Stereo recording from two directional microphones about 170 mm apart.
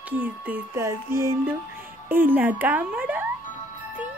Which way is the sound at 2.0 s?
10° right (ahead or behind).